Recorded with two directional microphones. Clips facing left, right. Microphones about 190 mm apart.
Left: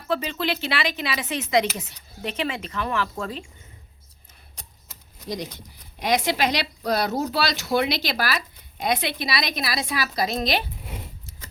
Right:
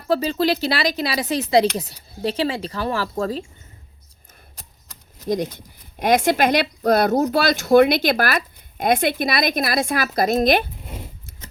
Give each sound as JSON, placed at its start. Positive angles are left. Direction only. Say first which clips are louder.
{"t": 0.1, "sound": "speech", "louder": "right 6 dB", "side_deg": -40}
{"t": 4.5, "sound": "a sound", "louder": "left 3 dB", "side_deg": 0}
{"t": 5.3, "sound": "speech", "louder": "right 9 dB", "side_deg": -50}